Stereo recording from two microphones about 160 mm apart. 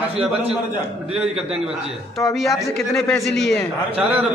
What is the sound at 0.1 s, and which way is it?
Speech, 40° right (ahead or behind).